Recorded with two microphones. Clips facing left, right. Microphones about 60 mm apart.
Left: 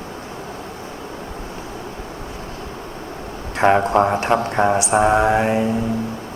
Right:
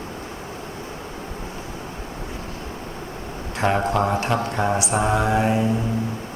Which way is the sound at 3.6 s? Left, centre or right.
Left.